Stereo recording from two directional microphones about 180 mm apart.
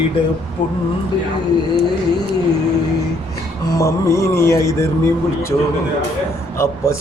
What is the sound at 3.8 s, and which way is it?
Speech, 15° left (ahead or behind).